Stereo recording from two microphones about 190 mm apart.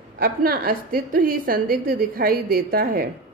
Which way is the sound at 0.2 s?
50° right (ahead or behind).